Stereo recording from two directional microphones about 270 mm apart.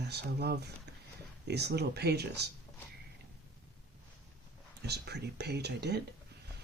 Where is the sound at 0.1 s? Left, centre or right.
Right.